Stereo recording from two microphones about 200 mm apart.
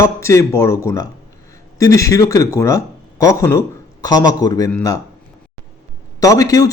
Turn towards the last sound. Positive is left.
turn(degrees=15)  # may be behind; listen again after turning